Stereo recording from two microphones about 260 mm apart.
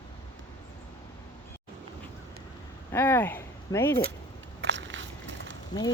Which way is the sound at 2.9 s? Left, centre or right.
Centre.